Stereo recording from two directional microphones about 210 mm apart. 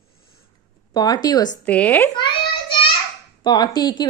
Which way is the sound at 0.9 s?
20° left (ahead or behind).